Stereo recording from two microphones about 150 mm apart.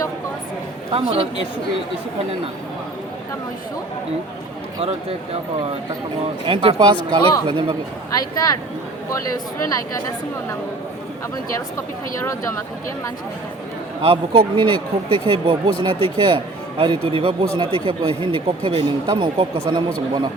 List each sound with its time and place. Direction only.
0.9 s speech: 40° right (ahead or behind)
4.8 s speech: 40° right (ahead or behind)
6.4 s speech: 35° right (ahead or behind)
9.6 s a woman's voice: 25° left (ahead or behind)
12.2 s a woman's voice: 20° left (ahead or behind)
14.0 s speech: 35° right (ahead or behind)